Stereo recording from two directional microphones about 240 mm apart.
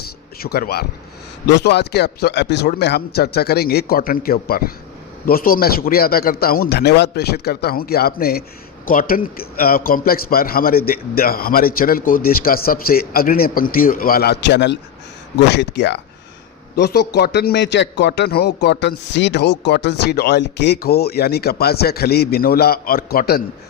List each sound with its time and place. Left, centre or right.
0.3 s a man's voice: left